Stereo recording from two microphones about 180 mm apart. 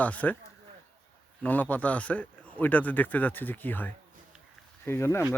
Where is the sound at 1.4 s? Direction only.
10° left (ahead or behind).